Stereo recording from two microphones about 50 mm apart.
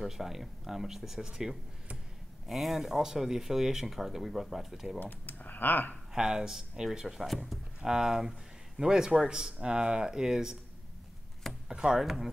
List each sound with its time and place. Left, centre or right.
0.0 s speech: centre
5.0 s speech: left
6.1 s speech: centre
11.7 s speech: centre